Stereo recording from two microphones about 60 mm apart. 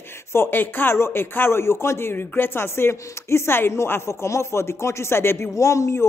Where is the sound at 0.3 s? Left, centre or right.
Left.